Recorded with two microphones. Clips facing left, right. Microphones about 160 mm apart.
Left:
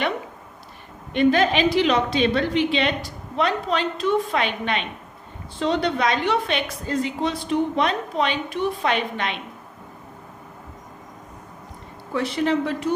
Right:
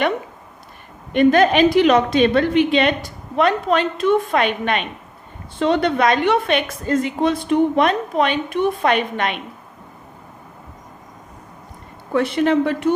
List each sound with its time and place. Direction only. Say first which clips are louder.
1.1 s a woman's voice: right 5 dB; 50° right (ahead or behind)
12.1 s a woman's voice: right 5 dB; 60° right (ahead or behind)